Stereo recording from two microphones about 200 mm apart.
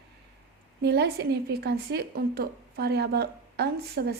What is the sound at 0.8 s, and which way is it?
Speech, 55° right (ahead or behind).